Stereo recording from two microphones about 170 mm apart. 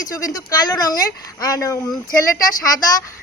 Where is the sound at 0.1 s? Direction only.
20° left (ahead or behind).